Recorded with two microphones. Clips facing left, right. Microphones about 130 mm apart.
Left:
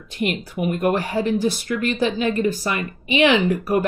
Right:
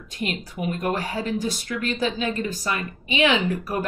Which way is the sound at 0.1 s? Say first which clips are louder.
Left 5 dB; 60° left (ahead or behind).